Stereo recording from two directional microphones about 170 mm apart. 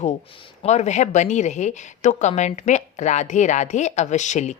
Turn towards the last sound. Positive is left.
turn(degrees=45)  # may be behind; listen again after turning